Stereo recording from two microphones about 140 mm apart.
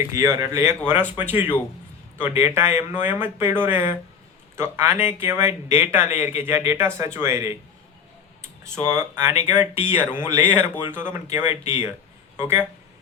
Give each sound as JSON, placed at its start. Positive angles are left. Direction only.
{"t": 0.1, "sound": "speech", "side_deg": -20}
{"t": 8.9, "sound": "speech", "side_deg": -15}